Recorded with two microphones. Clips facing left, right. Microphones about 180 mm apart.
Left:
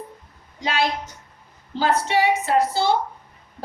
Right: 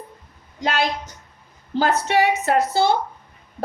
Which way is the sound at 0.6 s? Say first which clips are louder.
Right 1 dB; 45° right (ahead or behind).